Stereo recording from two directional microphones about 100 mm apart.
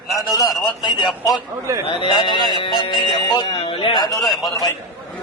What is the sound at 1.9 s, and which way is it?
Speech, 55° left (ahead or behind).